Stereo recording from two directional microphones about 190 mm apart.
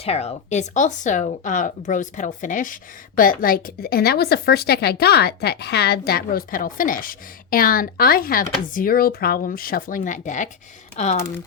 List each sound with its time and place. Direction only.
0.0 s a woman's voice: 35° left (ahead or behind)